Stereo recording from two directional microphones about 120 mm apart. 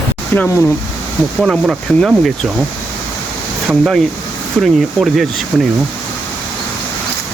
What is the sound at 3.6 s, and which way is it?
Speech, centre (ahead or behind).